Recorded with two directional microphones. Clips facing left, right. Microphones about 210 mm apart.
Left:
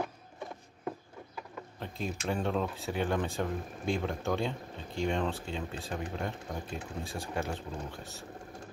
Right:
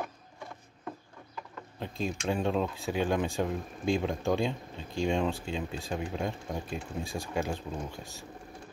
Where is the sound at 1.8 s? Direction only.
15° right (ahead or behind).